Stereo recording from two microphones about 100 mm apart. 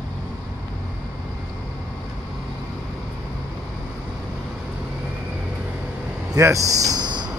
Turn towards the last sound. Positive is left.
turn(degrees=-45)  # may be behind; listen again after turning